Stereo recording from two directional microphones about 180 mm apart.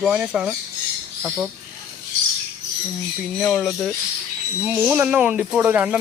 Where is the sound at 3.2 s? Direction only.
Centre (ahead or behind).